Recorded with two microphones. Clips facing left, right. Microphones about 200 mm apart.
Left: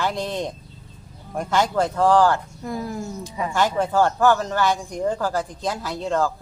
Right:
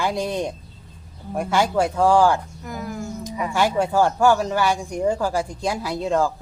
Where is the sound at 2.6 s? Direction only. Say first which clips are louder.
Left 2 dB; 30° left (ahead or behind).